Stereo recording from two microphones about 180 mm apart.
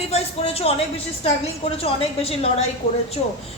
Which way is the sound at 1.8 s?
35° left (ahead or behind).